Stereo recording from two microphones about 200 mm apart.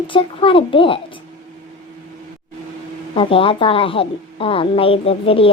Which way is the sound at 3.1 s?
25° left (ahead or behind).